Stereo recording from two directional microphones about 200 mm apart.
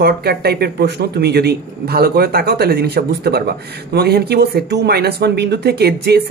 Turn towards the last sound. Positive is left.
turn(degrees=-55)  # may be behind; listen again after turning